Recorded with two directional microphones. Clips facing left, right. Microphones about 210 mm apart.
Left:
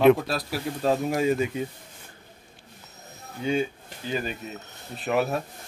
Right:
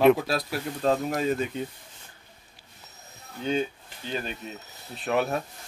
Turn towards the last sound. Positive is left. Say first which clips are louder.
# left 1 dB
turn(degrees=0)  # may be behind; listen again after turning